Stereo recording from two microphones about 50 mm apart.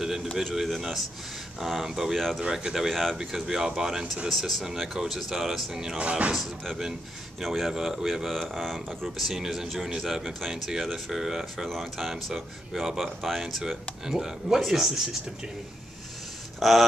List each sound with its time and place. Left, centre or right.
0.0 s a sound: centre
0.4 s speech: centre
5.9 s speech: right
6.3 s speech: centre
8.4 s speech: centre
16.5 s speech: centre